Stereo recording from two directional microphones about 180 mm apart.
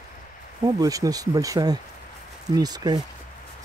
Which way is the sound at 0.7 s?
20° right (ahead or behind).